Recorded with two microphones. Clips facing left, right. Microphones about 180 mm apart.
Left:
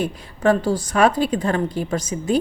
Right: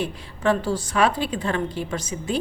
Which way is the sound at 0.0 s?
45° left (ahead or behind).